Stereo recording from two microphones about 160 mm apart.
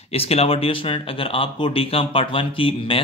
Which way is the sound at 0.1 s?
40° left (ahead or behind).